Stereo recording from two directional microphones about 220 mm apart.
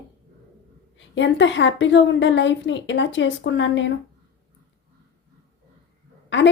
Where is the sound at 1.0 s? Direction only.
55° left (ahead or behind).